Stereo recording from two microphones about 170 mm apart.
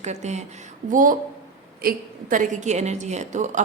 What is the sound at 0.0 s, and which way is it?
A woman's voice, 40° right (ahead or behind).